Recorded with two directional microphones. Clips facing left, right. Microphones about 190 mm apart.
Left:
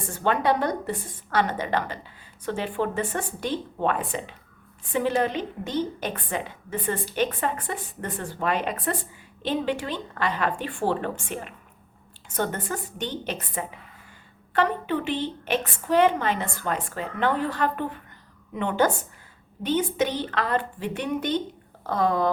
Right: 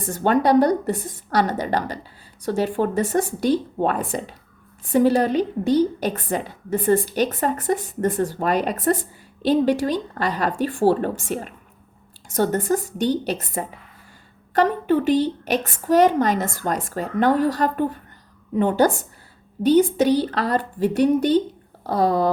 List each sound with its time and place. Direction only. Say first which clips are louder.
0.1 s a woman's voice: right 6 dB; 40° right (ahead or behind)